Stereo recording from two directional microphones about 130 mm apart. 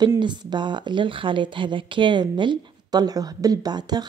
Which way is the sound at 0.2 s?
35° right (ahead or behind).